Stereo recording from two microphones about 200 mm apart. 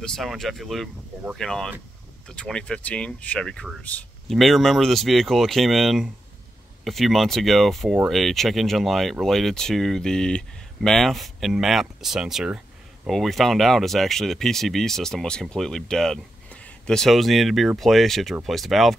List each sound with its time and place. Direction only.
0.0 s speech: centre (ahead or behind)